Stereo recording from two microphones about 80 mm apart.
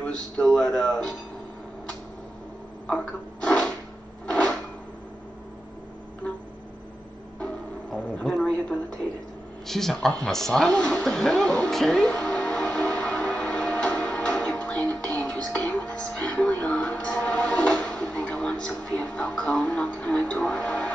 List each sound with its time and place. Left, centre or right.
0.0 s speech: centre
2.9 s a sound: centre
4.3 s drawer open or close: centre
7.9 s a sound: centre
9.7 s speech: centre
12.1 s music: centre